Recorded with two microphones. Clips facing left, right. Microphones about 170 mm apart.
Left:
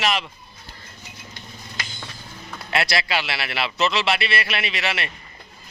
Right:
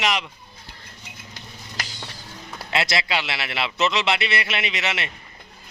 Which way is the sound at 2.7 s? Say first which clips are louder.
Left 1 dB; 20° right (ahead or behind).